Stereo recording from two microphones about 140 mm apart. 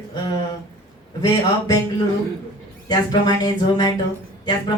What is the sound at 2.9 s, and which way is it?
Music, 30° left (ahead or behind).